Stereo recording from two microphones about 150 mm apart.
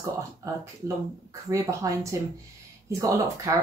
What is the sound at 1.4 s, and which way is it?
Speech, 20° right (ahead or behind).